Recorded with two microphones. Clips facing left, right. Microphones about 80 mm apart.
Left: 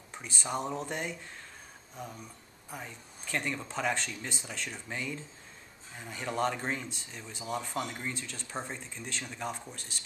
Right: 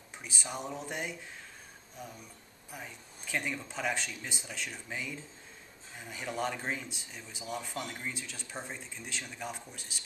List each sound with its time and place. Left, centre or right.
0.2 s speech: centre
2.7 s speech: centre